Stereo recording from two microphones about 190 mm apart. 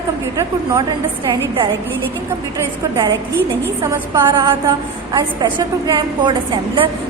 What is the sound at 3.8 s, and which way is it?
A woman's voice, 15° right (ahead or behind).